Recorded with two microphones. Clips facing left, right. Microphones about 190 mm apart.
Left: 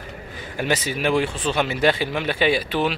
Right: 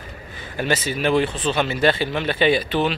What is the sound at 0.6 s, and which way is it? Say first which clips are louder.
Speech: right 1 dB; 15° left (ahead or behind).